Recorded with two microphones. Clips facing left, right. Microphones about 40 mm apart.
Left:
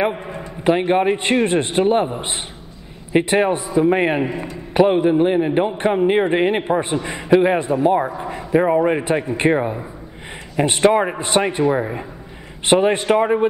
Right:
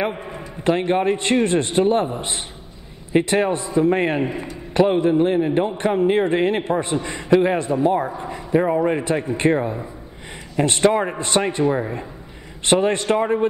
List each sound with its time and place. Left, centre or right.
0.7 s a man's voice: centre